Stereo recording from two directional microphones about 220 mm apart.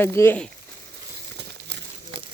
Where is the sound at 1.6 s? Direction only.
55° right (ahead or behind).